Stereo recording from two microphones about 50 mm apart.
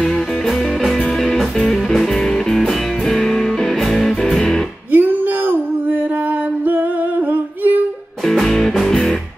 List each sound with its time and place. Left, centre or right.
1.6 s music: centre
3.9 s music: centre
4.9 s a sound: right
8.3 s music: centre